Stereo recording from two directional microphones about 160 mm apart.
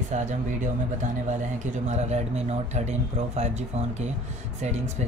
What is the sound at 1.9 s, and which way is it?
Speech, 45° right (ahead or behind).